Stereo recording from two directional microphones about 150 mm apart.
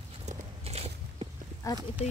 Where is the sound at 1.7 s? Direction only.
20° left (ahead or behind).